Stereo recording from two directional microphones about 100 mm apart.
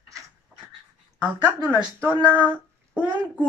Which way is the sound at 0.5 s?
10° right (ahead or behind).